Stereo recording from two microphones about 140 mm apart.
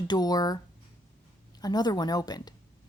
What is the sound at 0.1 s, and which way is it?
Speech, 30° left (ahead or behind).